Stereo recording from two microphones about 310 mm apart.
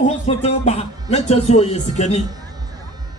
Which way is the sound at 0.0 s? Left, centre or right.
Left.